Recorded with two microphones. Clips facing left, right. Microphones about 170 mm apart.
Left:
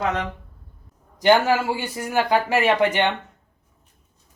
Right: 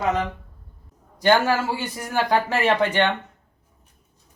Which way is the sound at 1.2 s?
15° left (ahead or behind).